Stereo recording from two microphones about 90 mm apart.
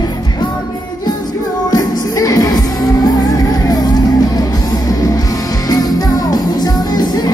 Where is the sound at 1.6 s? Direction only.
40° left (ahead or behind).